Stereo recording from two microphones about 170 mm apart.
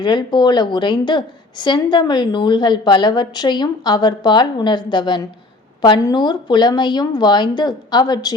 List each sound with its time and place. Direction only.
0.0 s a woman's voice: 25° left (ahead or behind)